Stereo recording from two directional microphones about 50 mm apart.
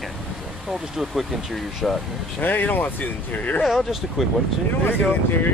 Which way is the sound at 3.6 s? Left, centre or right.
Centre.